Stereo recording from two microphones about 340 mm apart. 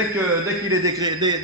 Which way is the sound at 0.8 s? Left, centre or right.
Centre.